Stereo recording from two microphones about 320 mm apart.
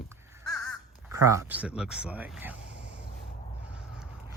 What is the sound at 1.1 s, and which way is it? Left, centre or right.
Speech, centre.